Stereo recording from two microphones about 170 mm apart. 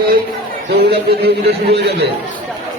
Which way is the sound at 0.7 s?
70° right (ahead or behind).